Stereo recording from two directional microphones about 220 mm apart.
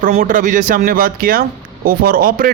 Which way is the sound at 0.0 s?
40° right (ahead or behind).